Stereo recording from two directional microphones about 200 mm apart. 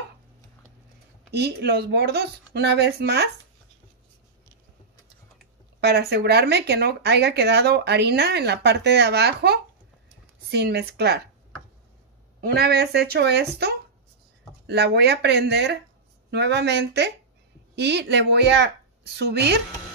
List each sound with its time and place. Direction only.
1.3 s speech: 55° right (ahead or behind)
5.8 s speech: 55° right (ahead or behind)
12.4 s speech: 50° right (ahead or behind)